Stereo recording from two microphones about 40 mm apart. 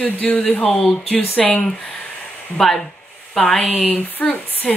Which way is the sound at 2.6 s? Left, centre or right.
Centre.